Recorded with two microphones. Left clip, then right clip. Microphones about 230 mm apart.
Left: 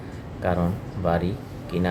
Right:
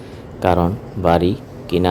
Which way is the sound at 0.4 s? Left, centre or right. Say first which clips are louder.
Right 9 dB; right.